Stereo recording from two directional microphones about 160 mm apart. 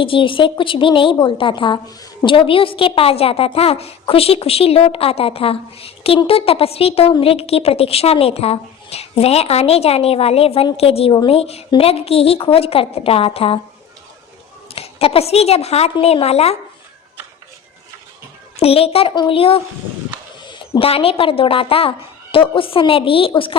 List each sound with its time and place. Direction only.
0.0 s a woman's voice: 35° left (ahead or behind)
14.7 s a woman's voice: 40° left (ahead or behind)
18.5 s a woman's voice: 40° left (ahead or behind)